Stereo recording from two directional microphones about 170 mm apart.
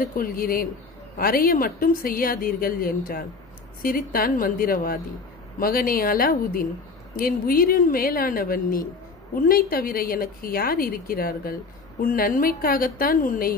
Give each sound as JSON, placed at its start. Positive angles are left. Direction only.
{"t": 0.0, "sound": "a woman's voice", "side_deg": 55}